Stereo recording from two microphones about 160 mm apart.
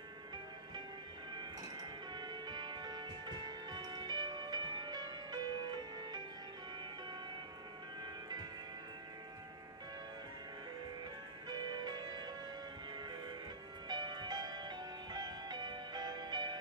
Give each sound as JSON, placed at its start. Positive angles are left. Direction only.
{"t": 1.3, "sound": "music", "side_deg": -25}
{"t": 8.0, "sound": "music", "side_deg": -25}
{"t": 11.4, "sound": "music", "side_deg": -25}